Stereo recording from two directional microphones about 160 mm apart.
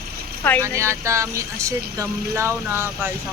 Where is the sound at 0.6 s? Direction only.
15° right (ahead or behind).